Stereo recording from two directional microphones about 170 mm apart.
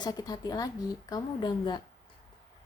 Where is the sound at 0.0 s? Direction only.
20° left (ahead or behind).